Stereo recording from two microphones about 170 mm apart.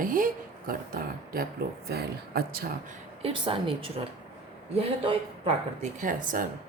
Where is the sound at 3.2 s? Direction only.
30° right (ahead or behind).